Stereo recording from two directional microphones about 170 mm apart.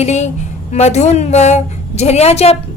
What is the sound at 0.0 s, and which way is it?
A woman's voice, 40° left (ahead or behind).